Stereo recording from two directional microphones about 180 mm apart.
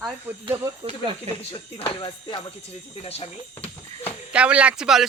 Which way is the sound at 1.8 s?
25° left (ahead or behind).